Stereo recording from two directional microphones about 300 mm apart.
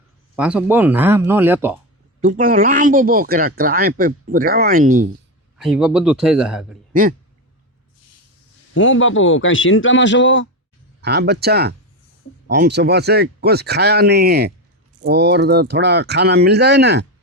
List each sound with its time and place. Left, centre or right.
0.3 s speech: centre
2.2 s speech: right
5.5 s a man's voice: centre
8.7 s a man's voice: left
11.0 s speech: right